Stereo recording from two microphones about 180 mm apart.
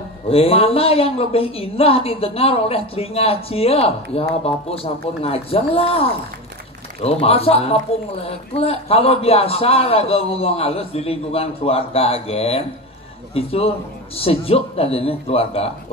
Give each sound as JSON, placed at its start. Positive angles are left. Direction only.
{"t": 0.3, "sound": "speech", "side_deg": 30}